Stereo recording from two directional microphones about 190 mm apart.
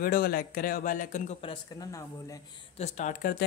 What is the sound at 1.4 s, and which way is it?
Speech, 30° left (ahead or behind).